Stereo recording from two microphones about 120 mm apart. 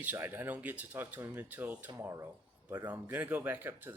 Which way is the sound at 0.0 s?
15° right (ahead or behind).